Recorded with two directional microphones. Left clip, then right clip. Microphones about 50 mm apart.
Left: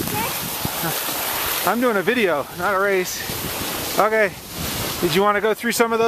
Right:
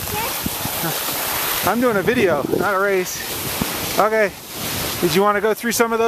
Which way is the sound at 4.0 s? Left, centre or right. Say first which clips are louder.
Right 1 dB; centre.